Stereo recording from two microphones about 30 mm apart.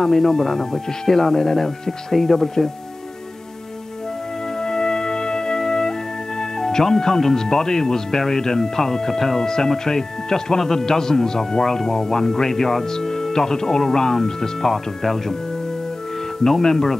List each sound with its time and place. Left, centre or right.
0.0 s speech: centre
4.6 s music: left
6.6 s speech: centre
16.4 s speech: centre